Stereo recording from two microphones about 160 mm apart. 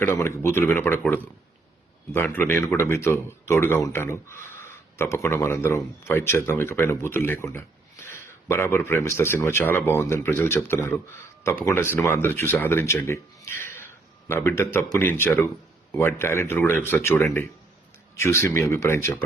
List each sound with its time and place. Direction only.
0.0 s speech: 15° left (ahead or behind)
2.1 s speech: 15° left (ahead or behind)